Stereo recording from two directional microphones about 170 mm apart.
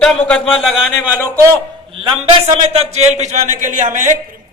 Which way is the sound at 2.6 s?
35° right (ahead or behind).